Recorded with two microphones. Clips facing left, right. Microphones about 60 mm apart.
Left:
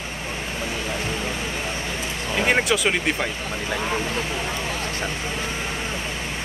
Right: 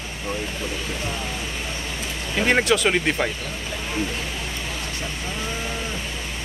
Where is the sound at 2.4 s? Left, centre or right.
Centre.